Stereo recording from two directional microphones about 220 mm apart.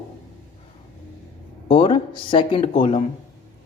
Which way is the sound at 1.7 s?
25° left (ahead or behind).